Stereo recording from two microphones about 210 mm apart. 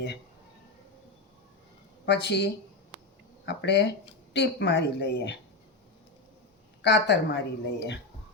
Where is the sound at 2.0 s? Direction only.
55° left (ahead or behind).